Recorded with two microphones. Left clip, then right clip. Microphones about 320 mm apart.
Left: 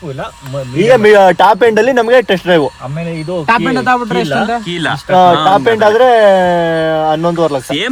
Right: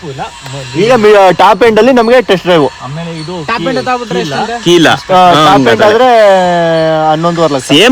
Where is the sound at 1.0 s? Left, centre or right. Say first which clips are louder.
Right 3 dB; right.